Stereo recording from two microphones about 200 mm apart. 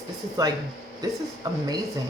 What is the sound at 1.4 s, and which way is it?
Speech, 15° right (ahead or behind).